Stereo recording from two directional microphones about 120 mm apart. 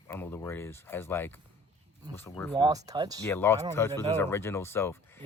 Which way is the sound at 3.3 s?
20° left (ahead or behind).